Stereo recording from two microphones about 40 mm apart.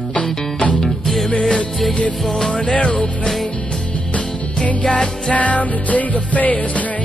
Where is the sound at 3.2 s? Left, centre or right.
Centre.